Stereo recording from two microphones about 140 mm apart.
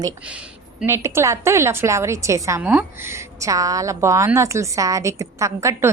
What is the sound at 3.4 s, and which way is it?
Speech, 25° right (ahead or behind).